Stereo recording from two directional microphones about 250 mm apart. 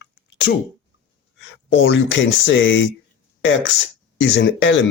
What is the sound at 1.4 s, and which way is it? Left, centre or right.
Speech, left.